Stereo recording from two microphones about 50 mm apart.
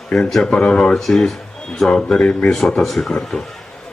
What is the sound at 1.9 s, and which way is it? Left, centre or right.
Speech, centre.